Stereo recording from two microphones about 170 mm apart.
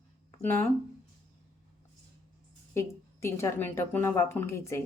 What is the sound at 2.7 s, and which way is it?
Speech, 15° left (ahead or behind).